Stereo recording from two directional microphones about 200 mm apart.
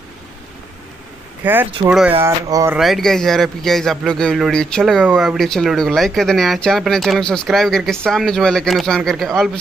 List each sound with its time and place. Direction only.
1.4 s speech: 10° right (ahead or behind)
2.8 s speech: centre (ahead or behind)